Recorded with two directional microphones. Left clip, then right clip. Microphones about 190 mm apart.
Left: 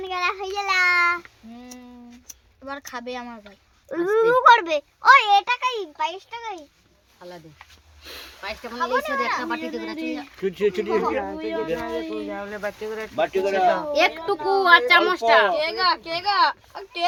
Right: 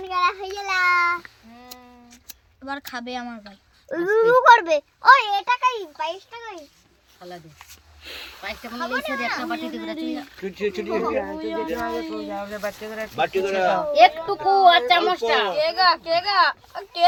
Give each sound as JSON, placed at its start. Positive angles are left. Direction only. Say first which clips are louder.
{"t": 0.1, "sound": "child singing", "louder": "right 4 dB", "side_deg": -10}
{"t": 2.6, "sound": "speech", "louder": "right 1 dB", "side_deg": 10}
{"t": 3.8, "sound": "a child's voice", "louder": "right 1 dB", "side_deg": -20}
{"t": 8.0, "sound": "speech", "louder": "right 1 dB", "side_deg": 10}
{"t": 10.4, "sound": "speech", "louder": "left 5 dB", "side_deg": 25}
{"t": 11.3, "sound": "speech", "louder": "even", "side_deg": 10}
{"t": 13.1, "sound": "speech", "louder": "left 1 dB", "side_deg": 20}
{"t": 15.5, "sound": "speech", "louder": "right 3 dB", "side_deg": 20}